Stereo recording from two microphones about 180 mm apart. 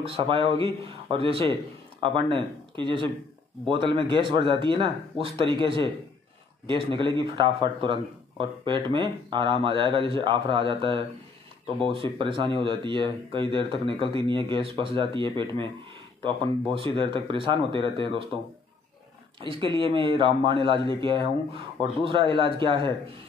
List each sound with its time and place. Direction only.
0.0 s speech: 30° right (ahead or behind)
19.4 s speech: 30° right (ahead or behind)